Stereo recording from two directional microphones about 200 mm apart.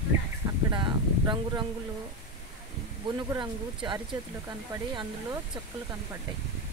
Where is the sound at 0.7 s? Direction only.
20° right (ahead or behind).